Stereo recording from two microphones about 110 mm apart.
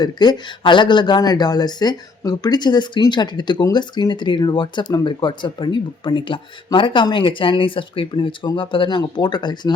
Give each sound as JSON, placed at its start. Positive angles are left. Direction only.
{"t": 0.0, "sound": "speech", "side_deg": 40}